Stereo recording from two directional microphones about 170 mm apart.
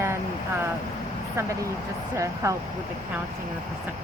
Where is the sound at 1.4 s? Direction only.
15° right (ahead or behind).